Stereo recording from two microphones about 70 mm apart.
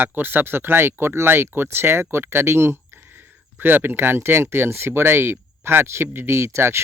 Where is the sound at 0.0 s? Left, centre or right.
Right.